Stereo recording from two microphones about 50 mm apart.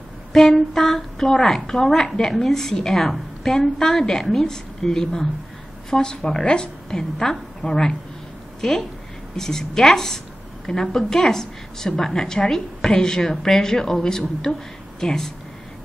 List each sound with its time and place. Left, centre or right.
0.3 s a woman's voice: centre
7.6 s speech: left
8.5 s a woman's voice: centre